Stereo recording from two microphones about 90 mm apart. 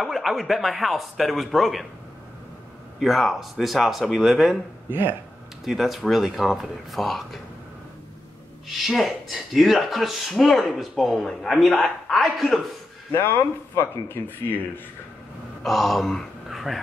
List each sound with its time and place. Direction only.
0.0 s speech: centre (ahead or behind)
3.0 s speech: centre (ahead or behind)
4.8 s speech: 20° right (ahead or behind)
5.7 s speech: centre (ahead or behind)
8.6 s speech: centre (ahead or behind)
13.7 s speech: 25° left (ahead or behind)
15.6 s speech: centre (ahead or behind)